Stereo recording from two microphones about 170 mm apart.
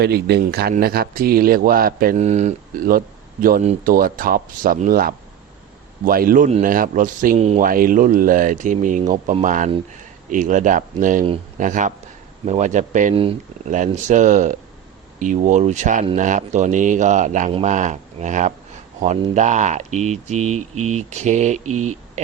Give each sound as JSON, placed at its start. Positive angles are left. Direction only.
{"t": 0.0, "sound": "a man's voice", "side_deg": -70}
{"t": 2.1, "sound": "a man's voice", "side_deg": -40}
{"t": 7.7, "sound": "speech", "side_deg": -55}